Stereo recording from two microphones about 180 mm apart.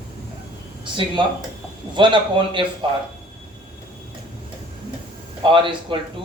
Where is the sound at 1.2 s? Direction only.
25° right (ahead or behind).